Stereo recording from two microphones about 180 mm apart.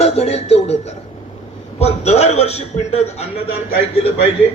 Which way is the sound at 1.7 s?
35° left (ahead or behind).